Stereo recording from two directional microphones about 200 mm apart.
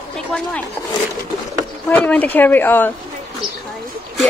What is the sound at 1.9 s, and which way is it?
Speech, 5° left (ahead or behind).